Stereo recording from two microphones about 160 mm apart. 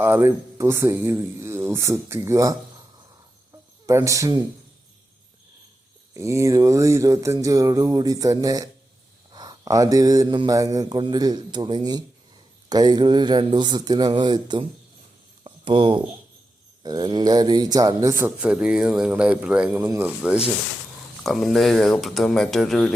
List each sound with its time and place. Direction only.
0.0 s speech: 15° right (ahead or behind)
3.8 s speech: 20° right (ahead or behind)
6.1 s speech: 20° right (ahead or behind)
15.4 s a sound: 30° right (ahead or behind)
16.8 s speech: 25° right (ahead or behind); by 22.9 s centre (ahead or behind)